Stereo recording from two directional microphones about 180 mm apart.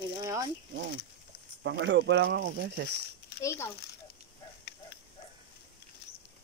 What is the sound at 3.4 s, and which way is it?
Speech, 15° left (ahead or behind).